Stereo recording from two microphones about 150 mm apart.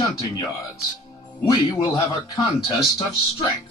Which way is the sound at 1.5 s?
30° left (ahead or behind).